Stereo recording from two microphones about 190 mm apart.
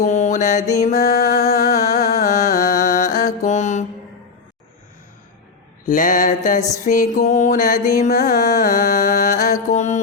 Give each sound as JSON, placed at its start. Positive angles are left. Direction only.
{"t": 0.0, "sound": "mantra", "side_deg": 35}
{"t": 0.9, "sound": "music", "side_deg": 40}
{"t": 5.8, "sound": "music", "side_deg": 45}